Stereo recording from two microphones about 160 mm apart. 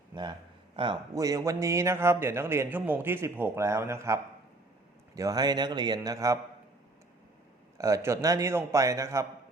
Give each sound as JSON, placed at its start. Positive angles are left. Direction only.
{"t": 0.1, "sound": "a man's voice", "side_deg": -30}
{"t": 7.8, "sound": "a man's voice", "side_deg": -20}